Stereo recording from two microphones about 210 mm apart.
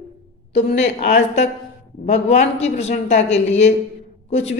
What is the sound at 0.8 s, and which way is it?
A woman's voice, 30° left (ahead or behind).